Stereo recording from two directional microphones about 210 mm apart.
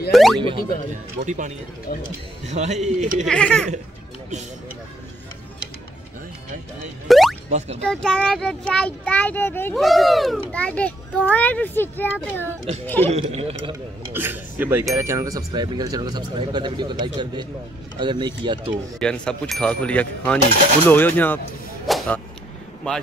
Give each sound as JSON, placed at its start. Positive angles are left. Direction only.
{"t": 0.1, "sound": "a child's voice", "side_deg": 0}
{"t": 0.4, "sound": "speech", "side_deg": -25}
{"t": 1.1, "sound": "speech", "side_deg": -35}
{"t": 1.9, "sound": "speech", "side_deg": 45}
{"t": 2.5, "sound": "speech", "side_deg": -35}
{"t": 3.3, "sound": "a child's voice", "side_deg": 5}
{"t": 7.1, "sound": "a sound", "side_deg": 0}
{"t": 7.4, "sound": "speech", "side_deg": -30}
{"t": 7.8, "sound": "a child's voice", "side_deg": 5}
{"t": 13.1, "sound": "speech", "side_deg": -30}
{"t": 14.1, "sound": "speech", "side_deg": -10}
{"t": 18.9, "sound": "a child's voice", "side_deg": 5}
{"t": 21.8, "sound": "a sound", "side_deg": 0}